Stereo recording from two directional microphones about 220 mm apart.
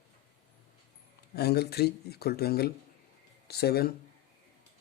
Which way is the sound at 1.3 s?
45° left (ahead or behind).